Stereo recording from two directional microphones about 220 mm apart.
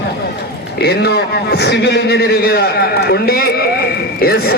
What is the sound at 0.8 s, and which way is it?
A man's voice, 45° left (ahead or behind).